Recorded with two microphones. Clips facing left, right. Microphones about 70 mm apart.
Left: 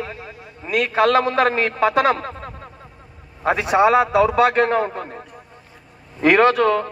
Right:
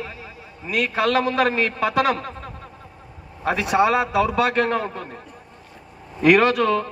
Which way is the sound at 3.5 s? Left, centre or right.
Left.